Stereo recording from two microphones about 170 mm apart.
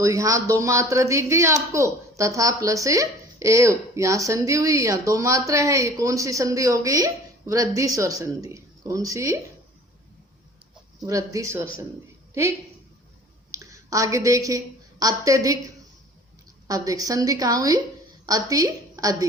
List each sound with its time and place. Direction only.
0.0 s speech: 20° right (ahead or behind)
11.0 s a woman's voice: 20° right (ahead or behind)